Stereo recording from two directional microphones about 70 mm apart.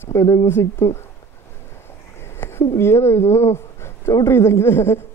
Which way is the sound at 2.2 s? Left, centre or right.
Left.